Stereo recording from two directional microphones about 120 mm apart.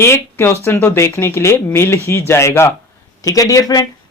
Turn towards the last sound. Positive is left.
turn(degrees=30)  # may be behind; listen again after turning